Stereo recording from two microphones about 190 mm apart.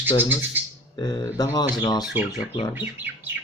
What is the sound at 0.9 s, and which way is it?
Speech, 20° left (ahead or behind).